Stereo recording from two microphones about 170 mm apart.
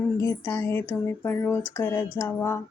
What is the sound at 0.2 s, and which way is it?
Speech, 15° left (ahead or behind).